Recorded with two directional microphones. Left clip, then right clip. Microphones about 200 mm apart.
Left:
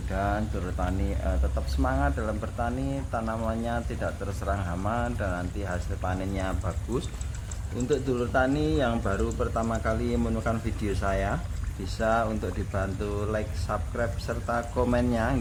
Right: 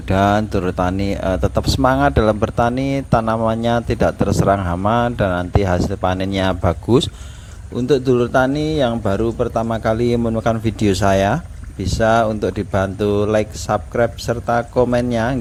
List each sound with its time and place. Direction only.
0.1 s speech: 55° right (ahead or behind)